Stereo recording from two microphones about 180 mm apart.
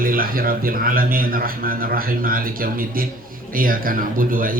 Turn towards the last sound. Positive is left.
turn(degrees=-50)  # may be behind; listen again after turning